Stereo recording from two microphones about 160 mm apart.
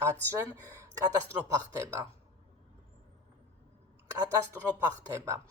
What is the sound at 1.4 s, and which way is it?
Speech, 15° right (ahead or behind).